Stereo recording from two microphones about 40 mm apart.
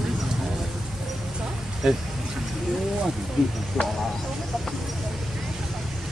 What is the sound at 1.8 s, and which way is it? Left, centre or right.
Speech, centre.